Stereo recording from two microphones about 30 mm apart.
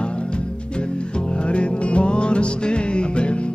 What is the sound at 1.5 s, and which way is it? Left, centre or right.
Music, left.